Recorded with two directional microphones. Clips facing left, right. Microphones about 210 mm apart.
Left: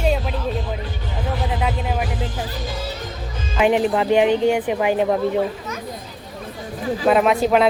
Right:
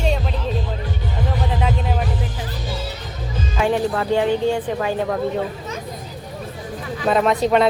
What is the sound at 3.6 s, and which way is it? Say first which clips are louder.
Speech: left 3 dB; 20° left (ahead or behind).